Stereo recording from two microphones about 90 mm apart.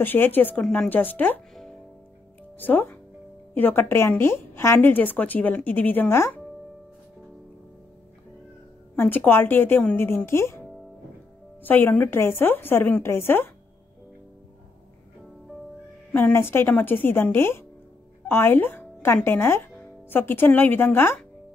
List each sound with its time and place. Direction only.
0.0 s speech: 20° left (ahead or behind)
1.5 s music: 5° left (ahead or behind)
2.6 s speech: 20° left (ahead or behind)
8.9 s speech: 20° left (ahead or behind)
11.6 s speech: 20° left (ahead or behind)
16.1 s speech: 20° left (ahead or behind)